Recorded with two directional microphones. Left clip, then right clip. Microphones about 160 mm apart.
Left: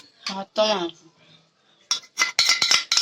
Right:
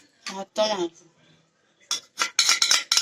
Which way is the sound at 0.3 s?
25° left (ahead or behind).